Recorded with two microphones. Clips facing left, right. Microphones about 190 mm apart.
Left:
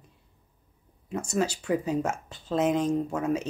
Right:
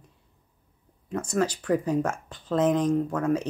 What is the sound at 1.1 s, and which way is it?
Speech, 10° left (ahead or behind).